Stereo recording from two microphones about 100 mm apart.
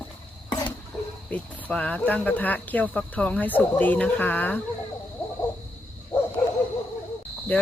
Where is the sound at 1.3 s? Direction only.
15° left (ahead or behind).